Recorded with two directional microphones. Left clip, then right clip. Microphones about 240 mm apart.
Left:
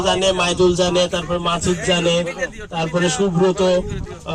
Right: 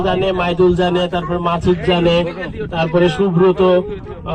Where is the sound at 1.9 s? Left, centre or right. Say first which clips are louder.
Right 2 dB; centre.